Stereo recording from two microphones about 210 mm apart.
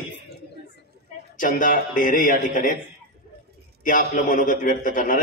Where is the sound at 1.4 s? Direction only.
40° left (ahead or behind).